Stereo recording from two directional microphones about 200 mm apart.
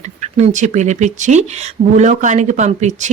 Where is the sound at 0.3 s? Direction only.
35° right (ahead or behind).